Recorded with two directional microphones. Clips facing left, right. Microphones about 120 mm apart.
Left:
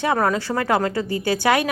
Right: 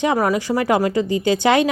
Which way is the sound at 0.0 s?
20° right (ahead or behind).